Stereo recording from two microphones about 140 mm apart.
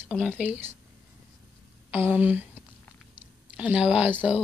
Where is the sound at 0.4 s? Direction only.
10° right (ahead or behind).